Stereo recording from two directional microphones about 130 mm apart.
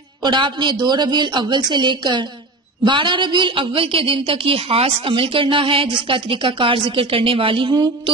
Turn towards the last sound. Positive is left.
turn(degrees=-40)  # may be behind; listen again after turning